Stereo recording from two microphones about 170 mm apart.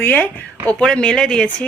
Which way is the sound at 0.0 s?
10° left (ahead or behind).